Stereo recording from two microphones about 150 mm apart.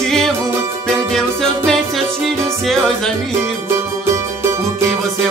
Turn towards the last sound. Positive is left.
turn(degrees=-20)  # may be behind; listen again after turning